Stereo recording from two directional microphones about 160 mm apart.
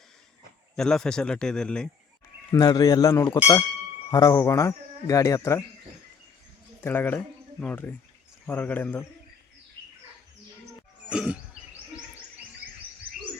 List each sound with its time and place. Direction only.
0.8 s a man's voice: 5° left (ahead or behind)
2.5 s speech: 25° left (ahead or behind)
6.8 s speech: 10° left (ahead or behind)
11.1 s a sound: 5° right (ahead or behind)